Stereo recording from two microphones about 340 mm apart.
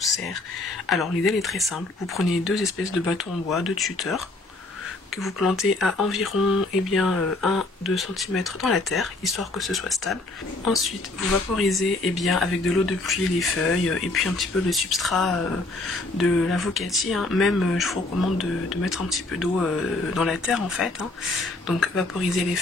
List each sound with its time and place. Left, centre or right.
0.8 s speech: centre
5.2 s speech: centre